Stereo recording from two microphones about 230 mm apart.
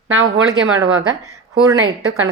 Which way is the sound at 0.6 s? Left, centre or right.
Right.